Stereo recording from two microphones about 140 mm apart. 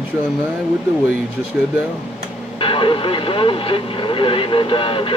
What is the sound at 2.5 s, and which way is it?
Speech, 40° left (ahead or behind).